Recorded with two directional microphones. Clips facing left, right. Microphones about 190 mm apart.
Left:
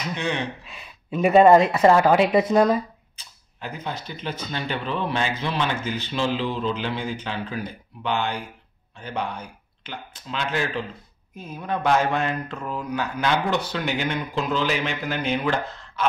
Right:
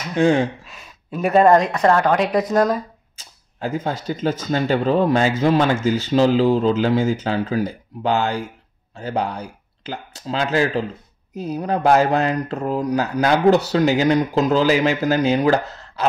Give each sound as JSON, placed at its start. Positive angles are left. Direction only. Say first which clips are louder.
{"t": 0.1, "sound": "speech", "louder": "right 12 dB", "side_deg": -50}
{"t": 1.1, "sound": "speech", "louder": "even", "side_deg": 0}
{"t": 4.0, "sound": "speech", "louder": "right 9 dB", "side_deg": -45}